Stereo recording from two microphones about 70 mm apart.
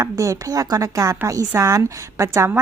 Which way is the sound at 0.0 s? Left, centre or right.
Right.